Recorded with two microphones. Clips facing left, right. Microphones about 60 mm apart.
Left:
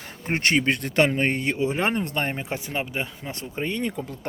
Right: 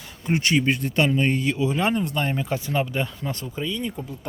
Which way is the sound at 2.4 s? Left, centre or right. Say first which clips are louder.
Right 4 dB; left.